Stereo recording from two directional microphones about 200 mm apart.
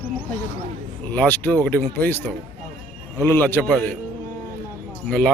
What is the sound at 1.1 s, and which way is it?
Speech, 10° left (ahead or behind).